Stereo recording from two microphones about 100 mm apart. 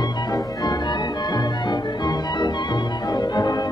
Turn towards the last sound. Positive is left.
turn(degrees=45)  # may be behind; listen again after turning